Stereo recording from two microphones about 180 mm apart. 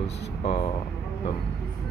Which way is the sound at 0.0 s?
35° left (ahead or behind).